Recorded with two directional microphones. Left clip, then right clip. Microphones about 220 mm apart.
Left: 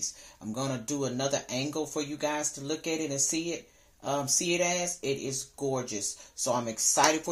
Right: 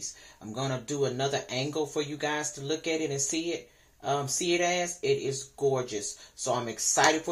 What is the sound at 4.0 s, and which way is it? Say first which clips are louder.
Speech: even; 45° left (ahead or behind).